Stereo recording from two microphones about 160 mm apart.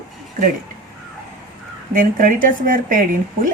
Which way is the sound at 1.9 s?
60° right (ahead or behind).